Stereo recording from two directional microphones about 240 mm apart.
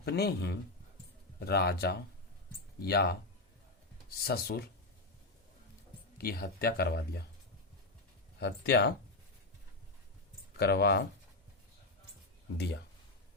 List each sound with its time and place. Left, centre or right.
0.0 s speech: left
4.2 s speech: left
6.1 s speech: left
8.4 s speech: left
10.6 s speech: left
12.5 s speech: left